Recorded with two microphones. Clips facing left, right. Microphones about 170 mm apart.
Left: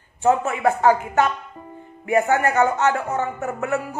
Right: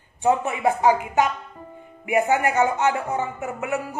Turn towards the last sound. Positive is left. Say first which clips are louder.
# left 3 dB
turn(degrees=-15)  # may be behind; listen again after turning